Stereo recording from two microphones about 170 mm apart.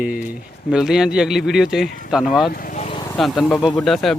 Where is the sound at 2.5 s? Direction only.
55° left (ahead or behind).